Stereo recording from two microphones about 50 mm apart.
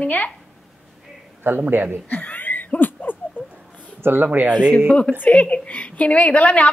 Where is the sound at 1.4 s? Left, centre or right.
Right.